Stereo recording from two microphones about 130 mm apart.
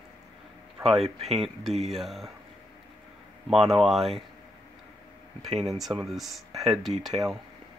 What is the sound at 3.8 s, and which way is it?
Speech, centre (ahead or behind).